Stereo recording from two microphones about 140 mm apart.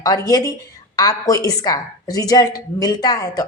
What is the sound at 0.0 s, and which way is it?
A woman's voice, 25° left (ahead or behind).